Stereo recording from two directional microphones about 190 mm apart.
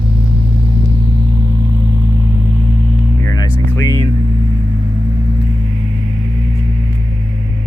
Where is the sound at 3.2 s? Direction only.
15° left (ahead or behind).